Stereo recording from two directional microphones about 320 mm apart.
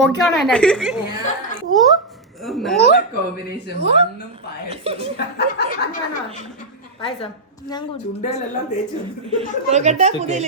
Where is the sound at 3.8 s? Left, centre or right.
Centre.